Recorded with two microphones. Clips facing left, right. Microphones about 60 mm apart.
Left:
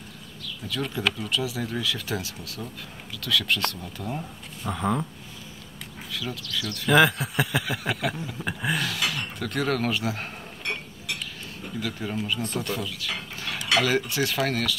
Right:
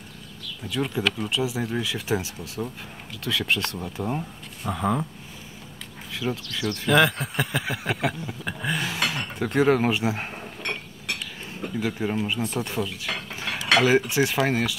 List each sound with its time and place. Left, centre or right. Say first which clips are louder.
0.7 s speech: right 2 dB; centre
4.6 s speech: right 1 dB; centre
6.1 s speech: right 3 dB; right
6.9 s speech: left 1 dB; centre
9.1 s speech: right 5 dB; right
10.6 s a sound: left 1 dB; right
11.8 s speech: right 4 dB; right